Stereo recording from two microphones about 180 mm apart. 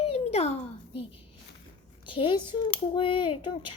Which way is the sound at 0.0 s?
35° left (ahead or behind).